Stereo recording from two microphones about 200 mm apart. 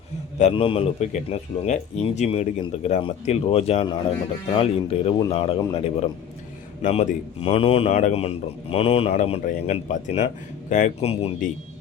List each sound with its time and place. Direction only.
0.3 s a man's voice: 30° left (ahead or behind)